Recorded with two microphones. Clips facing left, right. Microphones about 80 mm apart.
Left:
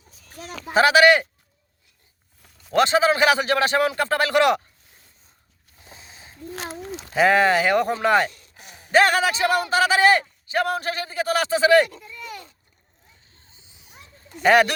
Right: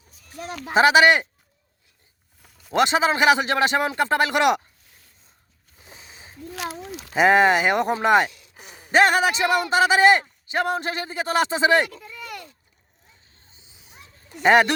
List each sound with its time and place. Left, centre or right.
0.7 s a man's voice: right
2.4 s a sound: centre
2.7 s a man's voice: right
6.5 s speech: left
7.1 s a man's voice: centre
13.8 s a sound: right